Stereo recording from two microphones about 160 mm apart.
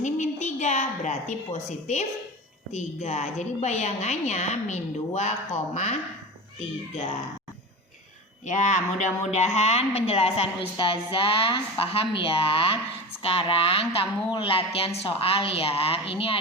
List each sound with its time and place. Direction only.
0.0 s a sound: 50° left (ahead or behind)
2.7 s a woman's voice: 45° left (ahead or behind)
8.4 s a woman's voice: 50° left (ahead or behind)